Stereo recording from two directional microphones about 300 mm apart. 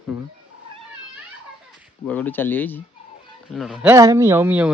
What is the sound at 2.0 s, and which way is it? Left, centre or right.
A man's voice, centre.